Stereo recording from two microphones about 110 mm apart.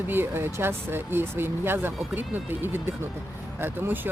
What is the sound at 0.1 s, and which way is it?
Speech, 20° right (ahead or behind).